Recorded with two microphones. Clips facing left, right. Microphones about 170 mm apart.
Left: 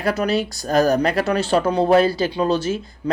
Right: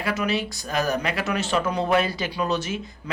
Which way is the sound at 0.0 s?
40° left (ahead or behind).